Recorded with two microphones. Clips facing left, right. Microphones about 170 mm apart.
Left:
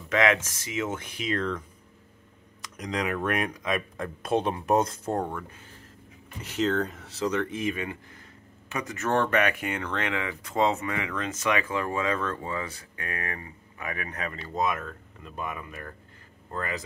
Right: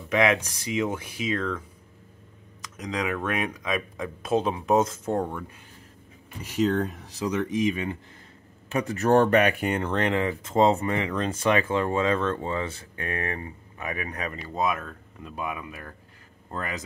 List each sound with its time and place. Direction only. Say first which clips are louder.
0.1 s speech: right 1 dB; 15° right (ahead or behind)
2.8 s speech: even; centre (ahead or behind)
6.4 s speech: right 2 dB; 15° right (ahead or behind)
8.7 s speech: right 6 dB; 35° right (ahead or behind); by 15.6 s 10° right (ahead or behind)
16.5 s speech: even; 20° right (ahead or behind)